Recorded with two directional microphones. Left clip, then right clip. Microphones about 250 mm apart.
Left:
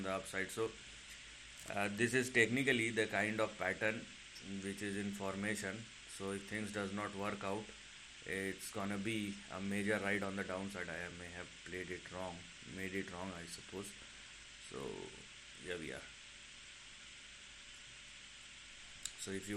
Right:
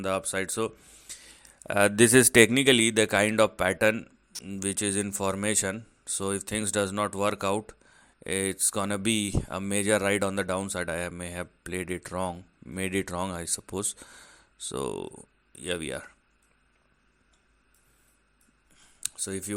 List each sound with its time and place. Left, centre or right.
0.0 s speech: right
15.6 s speech: right
19.2 s speech: right